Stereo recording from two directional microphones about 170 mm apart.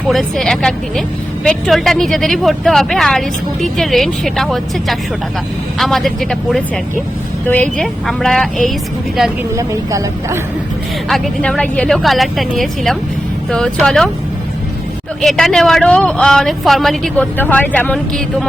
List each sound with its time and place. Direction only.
0.1 s speech: centre (ahead or behind)
9.6 s a woman's voice: 15° right (ahead or behind)
11.1 s speech: 5° left (ahead or behind)
15.2 s speech: centre (ahead or behind)